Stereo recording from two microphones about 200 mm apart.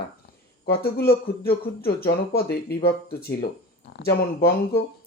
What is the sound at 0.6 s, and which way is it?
Speech, 50° left (ahead or behind).